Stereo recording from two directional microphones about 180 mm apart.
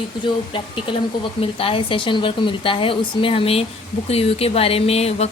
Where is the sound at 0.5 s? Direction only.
30° left (ahead or behind).